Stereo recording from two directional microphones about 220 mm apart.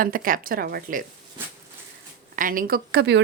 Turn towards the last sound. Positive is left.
turn(degrees=-50)  # may be behind; listen again after turning